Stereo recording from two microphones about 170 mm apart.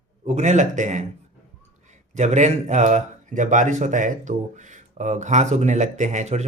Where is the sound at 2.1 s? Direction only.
45° right (ahead or behind).